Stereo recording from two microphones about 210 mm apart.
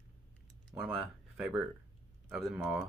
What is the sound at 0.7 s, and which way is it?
Speech, 15° right (ahead or behind).